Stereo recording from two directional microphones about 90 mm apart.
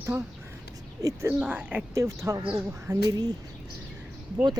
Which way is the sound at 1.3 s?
15° right (ahead or behind).